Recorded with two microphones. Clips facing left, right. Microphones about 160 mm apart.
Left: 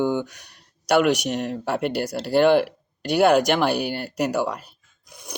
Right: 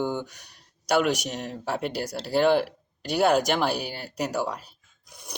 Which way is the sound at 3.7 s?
65° left (ahead or behind).